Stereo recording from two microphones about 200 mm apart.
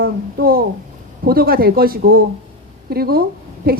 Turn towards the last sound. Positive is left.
turn(degrees=-50)  # may be behind; listen again after turning